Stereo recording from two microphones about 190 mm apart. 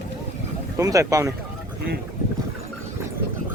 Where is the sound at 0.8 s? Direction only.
15° right (ahead or behind).